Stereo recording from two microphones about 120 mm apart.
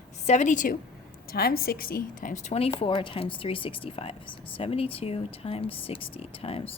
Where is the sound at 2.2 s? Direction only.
75° left (ahead or behind).